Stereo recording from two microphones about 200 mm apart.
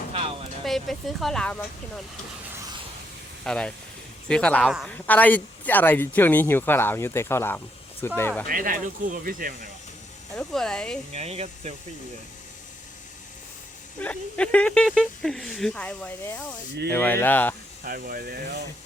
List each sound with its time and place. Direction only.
0.6 s speech: centre (ahead or behind)
3.4 s speech: 5° left (ahead or behind)
4.9 s speech: 10° left (ahead or behind)
8.4 s speech: 45° right (ahead or behind)
10.3 s speech: 5° left (ahead or behind)
11.1 s speech: 30° right (ahead or behind)
14.0 s speech: 5° left (ahead or behind)
17.8 s speech: 45° right (ahead or behind)